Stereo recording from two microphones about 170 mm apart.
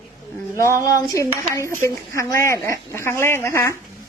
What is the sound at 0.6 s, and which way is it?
Dishes, 15° left (ahead or behind).